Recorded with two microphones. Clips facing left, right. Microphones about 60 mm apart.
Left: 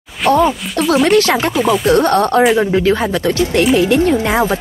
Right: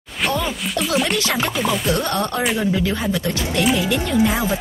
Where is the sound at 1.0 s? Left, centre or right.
Left.